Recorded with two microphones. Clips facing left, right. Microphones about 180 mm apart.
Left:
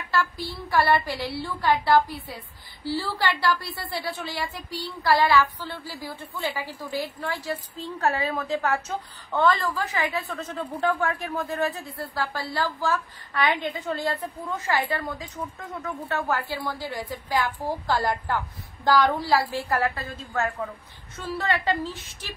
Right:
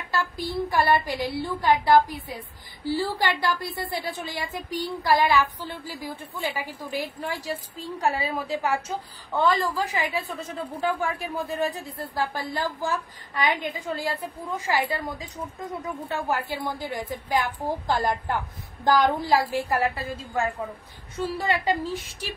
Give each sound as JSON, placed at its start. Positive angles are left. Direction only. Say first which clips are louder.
{"t": 0.1, "sound": "a woman's voice", "louder": "even", "side_deg": -20}